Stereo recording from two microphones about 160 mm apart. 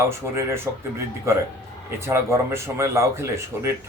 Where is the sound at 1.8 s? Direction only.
15° right (ahead or behind).